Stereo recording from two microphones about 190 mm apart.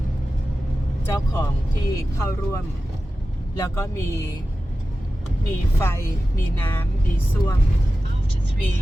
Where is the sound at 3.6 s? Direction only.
15° left (ahead or behind).